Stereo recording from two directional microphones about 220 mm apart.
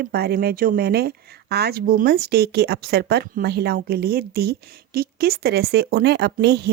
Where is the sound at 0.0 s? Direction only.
45° right (ahead or behind).